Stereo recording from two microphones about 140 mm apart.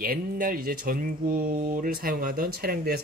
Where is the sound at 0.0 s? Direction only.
90° right.